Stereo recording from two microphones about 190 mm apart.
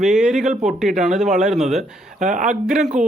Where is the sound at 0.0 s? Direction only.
5° right (ahead or behind).